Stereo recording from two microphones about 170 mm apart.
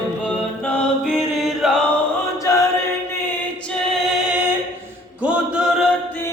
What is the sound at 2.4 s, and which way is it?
Chant, 20° left (ahead or behind).